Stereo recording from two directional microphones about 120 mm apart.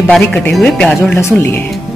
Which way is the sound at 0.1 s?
5° left (ahead or behind).